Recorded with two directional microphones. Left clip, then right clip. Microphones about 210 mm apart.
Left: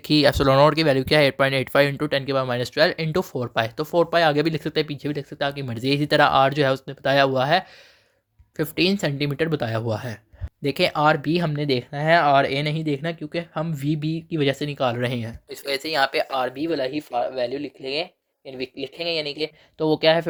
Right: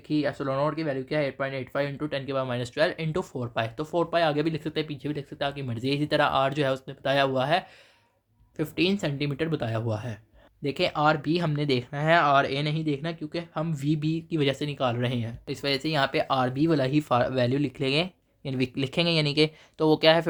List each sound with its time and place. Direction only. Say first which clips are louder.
0.1 s speech: left 10 dB; 50° left (ahead or behind); by 20.2 s 10° left (ahead or behind)